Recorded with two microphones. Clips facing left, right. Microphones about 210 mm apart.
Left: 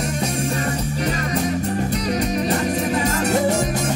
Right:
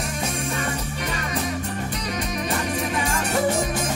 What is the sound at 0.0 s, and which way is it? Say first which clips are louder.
Music: left 5 dB; 40° left (ahead or behind).